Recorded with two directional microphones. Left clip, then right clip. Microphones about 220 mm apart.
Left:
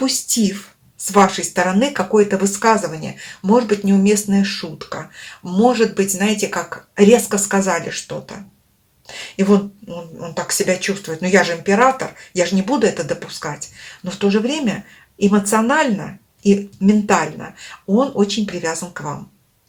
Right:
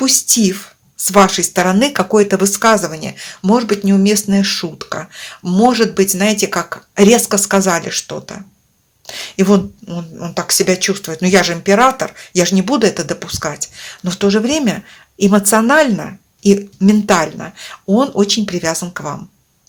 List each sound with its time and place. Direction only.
0.0 s speech: 45° right (ahead or behind)